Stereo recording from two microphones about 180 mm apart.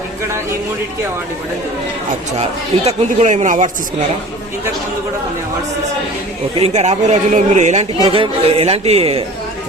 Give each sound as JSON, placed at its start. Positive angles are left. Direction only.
{"t": 2.4, "sound": "speech", "side_deg": -35}
{"t": 6.6, "sound": "speech", "side_deg": -35}